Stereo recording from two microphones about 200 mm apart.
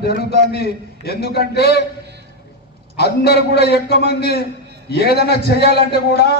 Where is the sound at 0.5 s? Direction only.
50° left (ahead or behind).